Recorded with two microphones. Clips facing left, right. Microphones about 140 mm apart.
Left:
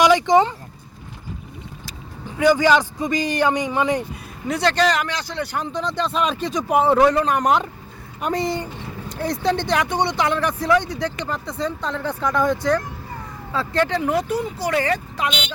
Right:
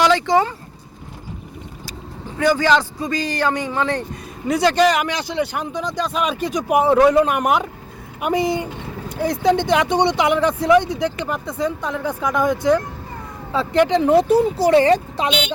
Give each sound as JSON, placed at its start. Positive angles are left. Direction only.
{"t": 0.0, "sound": "speech", "side_deg": 15}
{"t": 2.4, "sound": "a man's voice", "side_deg": 10}
{"t": 4.4, "sound": "speech", "side_deg": -5}
{"t": 9.5, "sound": "speech", "side_deg": -15}